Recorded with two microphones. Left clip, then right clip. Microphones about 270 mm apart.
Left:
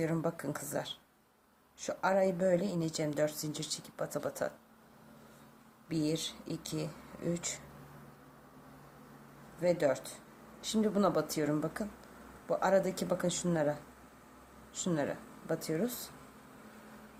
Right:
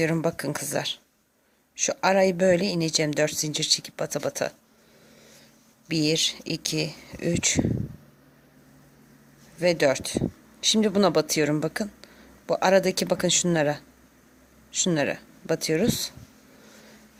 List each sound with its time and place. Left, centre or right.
0.0 s speech: right
5.9 s speech: right
9.6 s speech: right